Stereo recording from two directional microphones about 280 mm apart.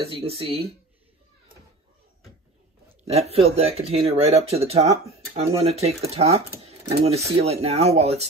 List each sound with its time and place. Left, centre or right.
0.0 s speech: centre
3.1 s speech: right